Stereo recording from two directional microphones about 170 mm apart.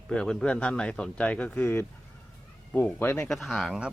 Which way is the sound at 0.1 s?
5° left (ahead or behind).